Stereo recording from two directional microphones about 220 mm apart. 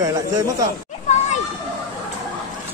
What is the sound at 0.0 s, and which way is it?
Speech, 15° right (ahead or behind).